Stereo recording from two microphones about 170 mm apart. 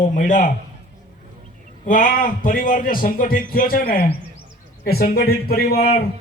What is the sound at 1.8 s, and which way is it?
A man's voice, 55° left (ahead or behind).